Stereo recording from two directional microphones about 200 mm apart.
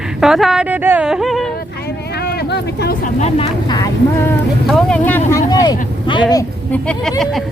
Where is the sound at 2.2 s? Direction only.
55° left (ahead or behind).